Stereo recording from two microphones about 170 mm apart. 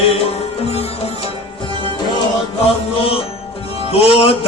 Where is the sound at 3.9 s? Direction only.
35° left (ahead or behind).